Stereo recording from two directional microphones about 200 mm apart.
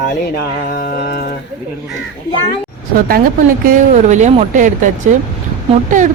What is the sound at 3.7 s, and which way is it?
A woman's voice, 35° right (ahead or behind).